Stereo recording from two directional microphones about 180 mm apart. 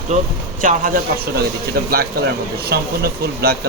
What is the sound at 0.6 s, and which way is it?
Speech, 45° right (ahead or behind).